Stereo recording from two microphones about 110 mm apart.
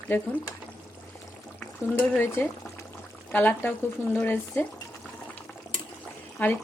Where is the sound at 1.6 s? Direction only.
15° left (ahead or behind).